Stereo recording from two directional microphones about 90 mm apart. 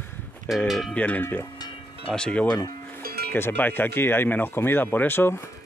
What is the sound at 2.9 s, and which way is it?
Speech, 25° left (ahead or behind).